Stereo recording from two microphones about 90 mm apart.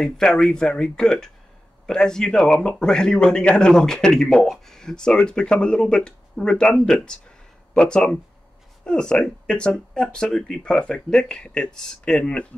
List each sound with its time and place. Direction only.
0.0 s a man's voice: 5° left (ahead or behind)